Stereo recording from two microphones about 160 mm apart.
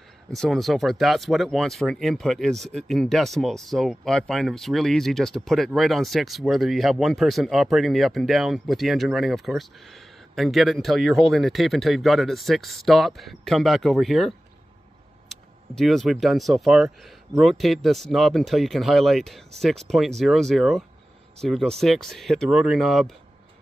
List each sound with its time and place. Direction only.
0.3 s speech: centre (ahead or behind)